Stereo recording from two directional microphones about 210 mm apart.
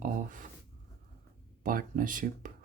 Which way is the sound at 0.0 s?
40° right (ahead or behind).